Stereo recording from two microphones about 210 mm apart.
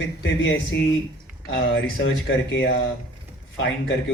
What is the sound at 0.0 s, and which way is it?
Speech, 60° left (ahead or behind).